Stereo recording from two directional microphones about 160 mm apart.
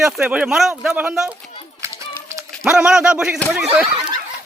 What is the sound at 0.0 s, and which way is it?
Speech, 5° right (ahead or behind).